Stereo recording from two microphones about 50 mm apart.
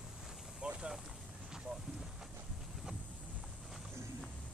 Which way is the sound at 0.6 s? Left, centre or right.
Centre.